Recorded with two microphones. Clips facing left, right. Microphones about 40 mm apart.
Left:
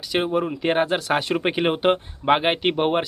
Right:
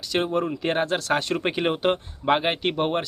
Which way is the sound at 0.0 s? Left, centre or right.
Centre.